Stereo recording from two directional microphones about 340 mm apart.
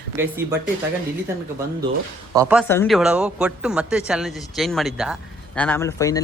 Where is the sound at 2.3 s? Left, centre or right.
Centre.